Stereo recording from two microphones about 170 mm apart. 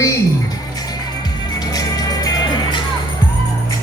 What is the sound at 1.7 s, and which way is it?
Music, 20° left (ahead or behind).